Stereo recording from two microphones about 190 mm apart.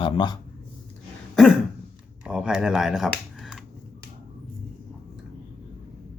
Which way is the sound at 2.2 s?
5° right (ahead or behind).